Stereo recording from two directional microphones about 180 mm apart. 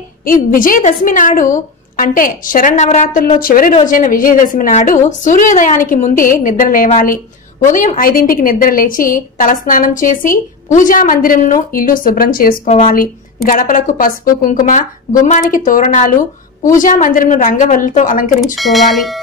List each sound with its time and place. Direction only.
0.2 s a woman's voice: 50° left (ahead or behind)
12.6 s speech: 35° left (ahead or behind)
13.5 s a woman's voice: 50° left (ahead or behind)
18.6 s speech: centre (ahead or behind)